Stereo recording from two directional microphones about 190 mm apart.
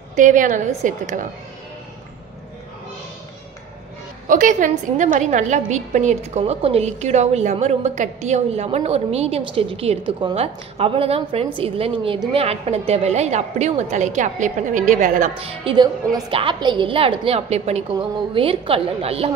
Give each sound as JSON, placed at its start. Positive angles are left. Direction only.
{"t": 0.1, "sound": "a woman's voice", "side_deg": -40}
{"t": 4.3, "sound": "a woman's voice", "side_deg": -45}
{"t": 15.6, "sound": "a woman's voice", "side_deg": -25}